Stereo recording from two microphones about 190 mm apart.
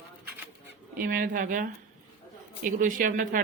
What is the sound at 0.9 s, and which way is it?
Speech, 50° right (ahead or behind).